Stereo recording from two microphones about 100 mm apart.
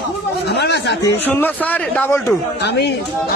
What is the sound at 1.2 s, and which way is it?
Speech, 20° left (ahead or behind).